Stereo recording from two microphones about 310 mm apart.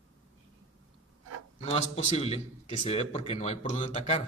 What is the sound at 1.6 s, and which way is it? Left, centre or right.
A man's voice, left.